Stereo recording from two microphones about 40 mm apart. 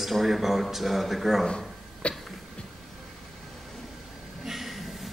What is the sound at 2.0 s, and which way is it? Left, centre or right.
Cough, left.